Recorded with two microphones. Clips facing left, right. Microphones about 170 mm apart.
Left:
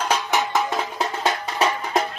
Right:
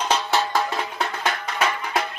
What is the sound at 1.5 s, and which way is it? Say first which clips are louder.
Music: left 3 dB; 30° left (ahead or behind).